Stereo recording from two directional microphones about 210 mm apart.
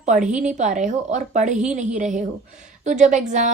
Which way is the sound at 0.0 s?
35° right (ahead or behind).